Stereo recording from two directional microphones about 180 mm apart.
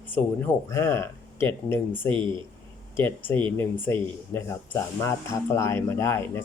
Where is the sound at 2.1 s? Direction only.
25° right (ahead or behind).